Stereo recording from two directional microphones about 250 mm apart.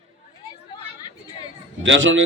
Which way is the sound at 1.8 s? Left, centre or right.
Right.